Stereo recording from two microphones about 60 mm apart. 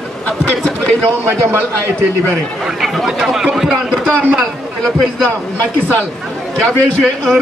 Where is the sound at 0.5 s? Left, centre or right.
Centre.